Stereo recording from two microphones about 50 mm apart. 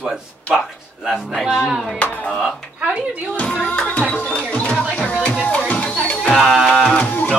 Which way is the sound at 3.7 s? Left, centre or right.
Left.